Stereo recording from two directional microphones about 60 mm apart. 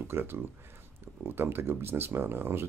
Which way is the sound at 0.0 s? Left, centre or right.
Right.